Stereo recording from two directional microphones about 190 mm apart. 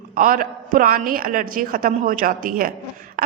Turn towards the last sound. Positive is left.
turn(degrees=-45)  # may be behind; listen again after turning